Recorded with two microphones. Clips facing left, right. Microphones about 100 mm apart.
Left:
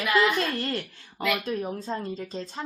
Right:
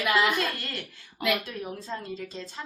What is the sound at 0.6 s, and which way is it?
A woman's voice, 35° left (ahead or behind).